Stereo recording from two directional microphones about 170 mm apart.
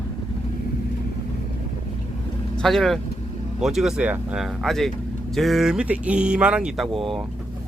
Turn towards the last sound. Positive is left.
turn(degrees=0)  # may be behind; listen again after turning